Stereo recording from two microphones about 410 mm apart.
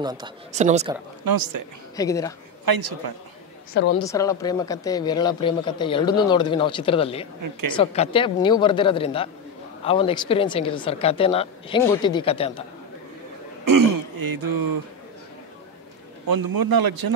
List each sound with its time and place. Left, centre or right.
0.0 s speech: centre
1.2 s speech: right
2.0 s speech: centre
2.6 s speech: right
4.0 s speech: centre
13.7 s speech: right
16.3 s speech: right